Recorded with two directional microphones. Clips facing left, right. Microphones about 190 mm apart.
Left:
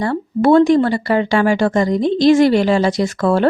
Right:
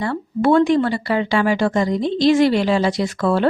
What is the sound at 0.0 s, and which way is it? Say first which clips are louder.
A woman's voice: left 3 dB; 40° left (ahead or behind).